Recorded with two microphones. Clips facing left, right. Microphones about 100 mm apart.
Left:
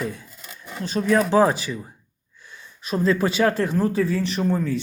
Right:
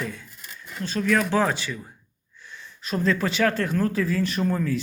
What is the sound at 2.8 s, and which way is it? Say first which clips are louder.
Speech: left 3 dB; 5° left (ahead or behind).